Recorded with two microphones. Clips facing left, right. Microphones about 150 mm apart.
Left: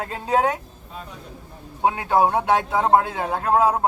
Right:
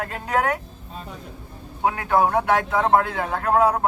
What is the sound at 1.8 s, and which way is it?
A man's voice, 20° left (ahead or behind).